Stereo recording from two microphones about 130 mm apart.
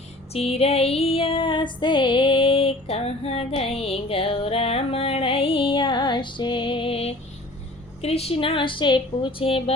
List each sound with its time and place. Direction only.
0.3 s female singing: 50° left (ahead or behind)